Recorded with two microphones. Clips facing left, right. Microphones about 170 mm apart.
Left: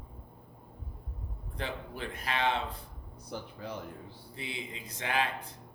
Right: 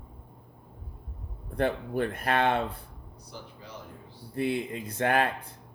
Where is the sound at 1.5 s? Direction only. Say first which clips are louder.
Right 11 dB; 55° right (ahead or behind).